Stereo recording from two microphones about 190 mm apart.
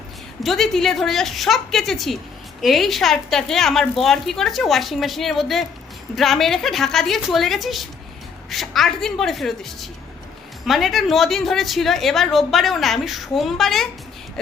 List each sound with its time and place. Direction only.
0.4 s a woman's voice: centre (ahead or behind)